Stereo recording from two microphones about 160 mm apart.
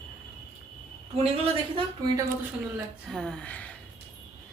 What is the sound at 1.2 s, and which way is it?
Speech, 35° right (ahead or behind).